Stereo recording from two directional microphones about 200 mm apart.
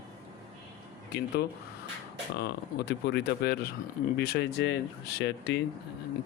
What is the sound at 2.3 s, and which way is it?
Speech, 55° left (ahead or behind).